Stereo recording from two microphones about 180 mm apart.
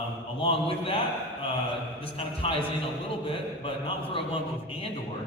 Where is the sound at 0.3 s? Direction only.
30° left (ahead or behind).